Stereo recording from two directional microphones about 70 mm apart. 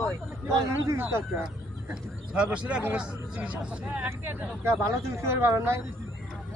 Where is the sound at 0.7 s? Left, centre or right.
Right.